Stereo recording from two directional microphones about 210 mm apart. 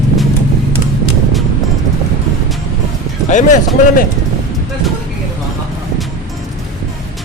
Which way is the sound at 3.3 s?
35° left (ahead or behind).